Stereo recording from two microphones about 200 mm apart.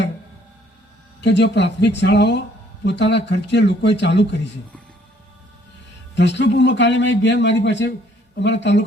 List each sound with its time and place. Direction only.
1.2 s a man's voice: 60° left (ahead or behind)
6.1 s a man's voice: 60° left (ahead or behind)